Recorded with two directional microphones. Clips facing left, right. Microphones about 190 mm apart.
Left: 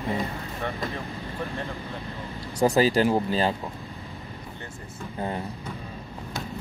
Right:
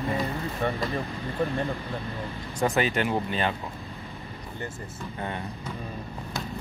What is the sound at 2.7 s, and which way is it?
Speech, 35° left (ahead or behind).